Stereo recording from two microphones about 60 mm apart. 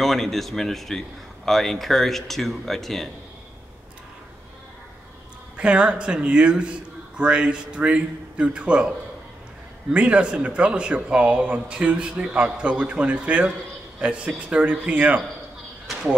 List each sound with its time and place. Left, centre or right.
0.0 s a man's voice: centre
5.6 s a man's voice: centre
9.9 s speech: centre